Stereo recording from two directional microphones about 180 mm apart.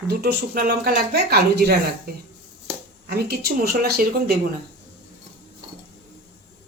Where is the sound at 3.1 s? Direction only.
60° right (ahead or behind).